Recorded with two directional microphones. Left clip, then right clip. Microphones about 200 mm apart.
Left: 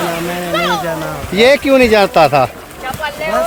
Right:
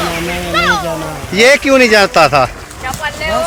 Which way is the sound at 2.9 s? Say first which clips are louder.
Right 1 dB; 55° left (ahead or behind).